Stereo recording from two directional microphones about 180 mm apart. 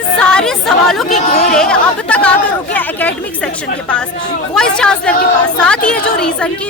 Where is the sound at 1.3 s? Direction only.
55° left (ahead or behind).